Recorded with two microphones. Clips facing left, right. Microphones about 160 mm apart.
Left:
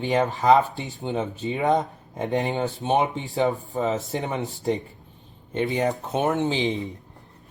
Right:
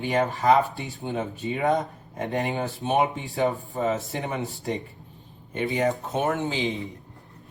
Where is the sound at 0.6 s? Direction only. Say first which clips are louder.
Left 2 dB; 20° left (ahead or behind).